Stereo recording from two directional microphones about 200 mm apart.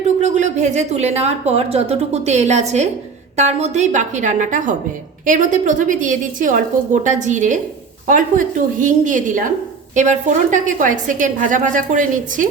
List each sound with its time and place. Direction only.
0.2 s a woman's voice: 35° right (ahead or behind)